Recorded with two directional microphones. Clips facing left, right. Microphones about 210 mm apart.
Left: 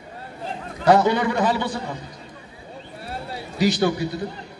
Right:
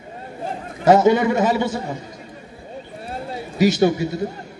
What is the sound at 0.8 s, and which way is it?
Speech, 20° right (ahead or behind).